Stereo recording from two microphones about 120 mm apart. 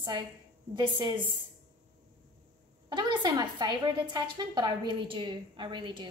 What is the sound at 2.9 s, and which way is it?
A woman's voice, 40° right (ahead or behind).